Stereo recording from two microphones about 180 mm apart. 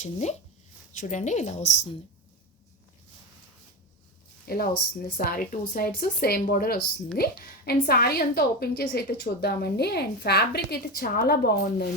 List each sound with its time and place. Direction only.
0.0 s speech: 40° left (ahead or behind)
4.4 s a woman's voice: 55° left (ahead or behind)